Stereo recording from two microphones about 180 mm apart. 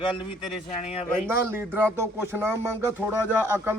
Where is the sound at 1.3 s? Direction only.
15° right (ahead or behind).